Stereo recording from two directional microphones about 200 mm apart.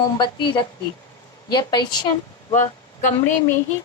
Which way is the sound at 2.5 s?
35° left (ahead or behind).